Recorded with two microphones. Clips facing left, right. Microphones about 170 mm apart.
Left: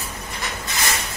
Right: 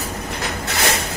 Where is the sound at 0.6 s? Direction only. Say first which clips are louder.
Right 7 dB; 70° right (ahead or behind).